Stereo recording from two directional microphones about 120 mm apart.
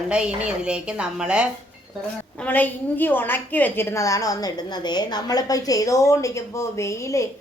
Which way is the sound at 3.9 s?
25° left (ahead or behind).